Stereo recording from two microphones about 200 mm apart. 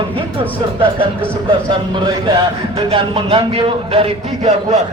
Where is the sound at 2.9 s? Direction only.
25° right (ahead or behind).